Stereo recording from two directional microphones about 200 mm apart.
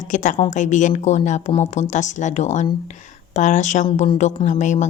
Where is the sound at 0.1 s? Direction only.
35° left (ahead or behind).